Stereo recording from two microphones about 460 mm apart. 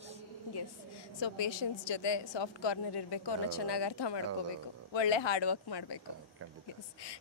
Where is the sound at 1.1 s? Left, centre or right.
Left.